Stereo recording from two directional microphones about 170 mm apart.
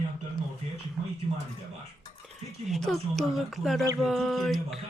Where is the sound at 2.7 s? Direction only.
Centre (ahead or behind).